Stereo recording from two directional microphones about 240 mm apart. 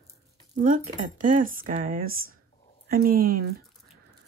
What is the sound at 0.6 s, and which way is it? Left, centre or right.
Speech, right.